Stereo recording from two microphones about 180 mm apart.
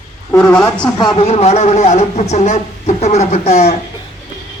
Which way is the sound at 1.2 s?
35° left (ahead or behind).